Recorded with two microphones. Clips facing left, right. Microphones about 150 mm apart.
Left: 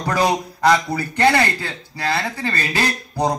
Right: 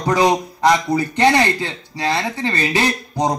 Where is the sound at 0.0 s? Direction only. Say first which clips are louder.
Right 3 dB; 20° right (ahead or behind).